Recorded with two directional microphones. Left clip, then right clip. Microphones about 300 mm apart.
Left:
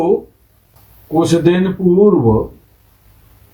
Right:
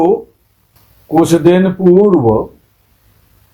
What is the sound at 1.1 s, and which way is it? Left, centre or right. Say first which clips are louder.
Speech: right 3 dB; right.